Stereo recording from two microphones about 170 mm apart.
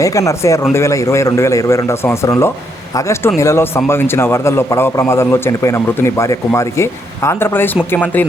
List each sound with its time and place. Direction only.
0.0 s speech: 20° left (ahead or behind)